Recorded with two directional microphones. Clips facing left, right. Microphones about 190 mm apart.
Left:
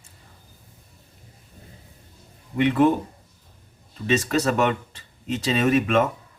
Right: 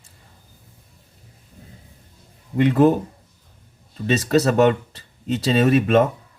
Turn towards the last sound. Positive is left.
turn(degrees=-35)  # may be behind; listen again after turning